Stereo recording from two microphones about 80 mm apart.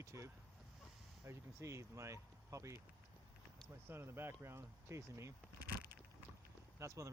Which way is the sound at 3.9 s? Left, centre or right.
Right.